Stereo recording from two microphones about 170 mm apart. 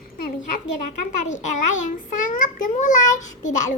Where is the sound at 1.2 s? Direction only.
45° left (ahead or behind).